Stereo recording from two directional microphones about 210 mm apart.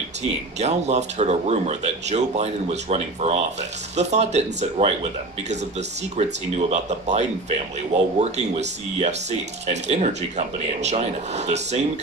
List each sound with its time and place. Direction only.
0.6 s speech: 30° right (ahead or behind)